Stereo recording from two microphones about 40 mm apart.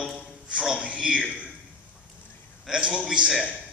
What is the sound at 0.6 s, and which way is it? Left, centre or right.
Speech, centre.